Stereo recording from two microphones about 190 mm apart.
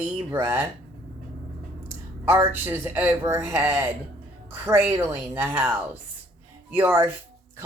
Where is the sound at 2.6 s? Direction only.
10° right (ahead or behind).